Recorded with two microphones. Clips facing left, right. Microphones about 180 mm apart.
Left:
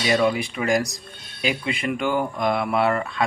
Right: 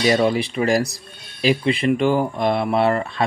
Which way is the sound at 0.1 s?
35° right (ahead or behind).